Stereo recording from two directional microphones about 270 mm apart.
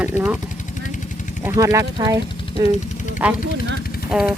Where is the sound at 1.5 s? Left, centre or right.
Centre.